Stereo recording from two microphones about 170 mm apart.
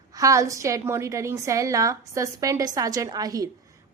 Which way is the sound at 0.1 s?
20° right (ahead or behind).